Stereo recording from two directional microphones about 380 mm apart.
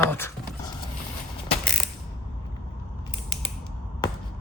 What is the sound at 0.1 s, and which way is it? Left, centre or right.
Speech, centre.